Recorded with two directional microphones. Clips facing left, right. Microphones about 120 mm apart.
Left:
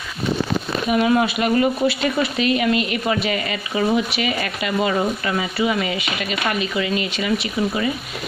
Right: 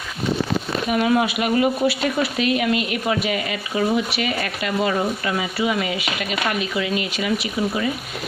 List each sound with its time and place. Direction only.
0.8 s speech: centre (ahead or behind)